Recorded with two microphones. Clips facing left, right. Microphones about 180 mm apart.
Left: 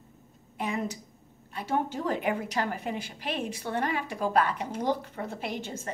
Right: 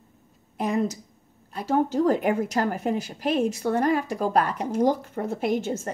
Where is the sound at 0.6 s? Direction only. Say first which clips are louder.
Right 7 dB; 40° right (ahead or behind).